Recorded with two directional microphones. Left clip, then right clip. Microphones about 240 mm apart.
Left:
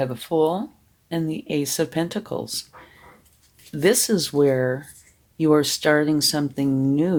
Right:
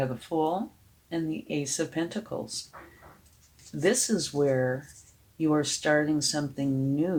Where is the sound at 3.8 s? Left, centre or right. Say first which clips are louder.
Left 7 dB; left.